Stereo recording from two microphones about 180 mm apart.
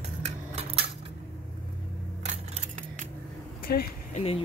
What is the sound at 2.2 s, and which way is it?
Scissors, 40° right (ahead or behind).